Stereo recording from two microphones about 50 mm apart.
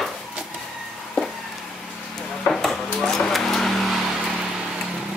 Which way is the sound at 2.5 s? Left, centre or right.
Centre.